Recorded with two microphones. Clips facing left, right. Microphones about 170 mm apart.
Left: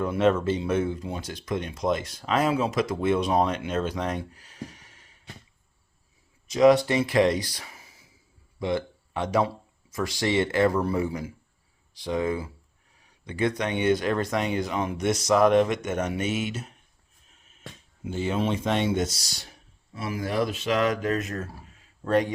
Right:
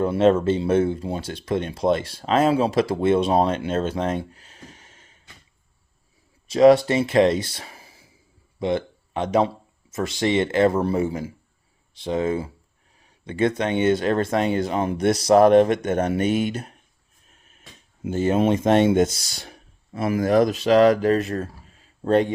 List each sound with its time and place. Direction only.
0.0 s speech: 30° right (ahead or behind)
6.5 s speech: 30° right (ahead or behind)
16.5 s speech: 55° right (ahead or behind)
18.0 s speech: 45° right (ahead or behind); by 22.3 s 30° right (ahead or behind)